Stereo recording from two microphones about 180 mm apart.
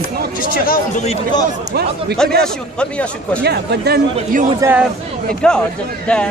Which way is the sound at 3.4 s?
65° right (ahead or behind).